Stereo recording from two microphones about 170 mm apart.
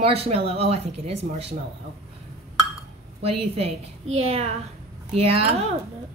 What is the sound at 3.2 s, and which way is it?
A woman's voice, 35° right (ahead or behind).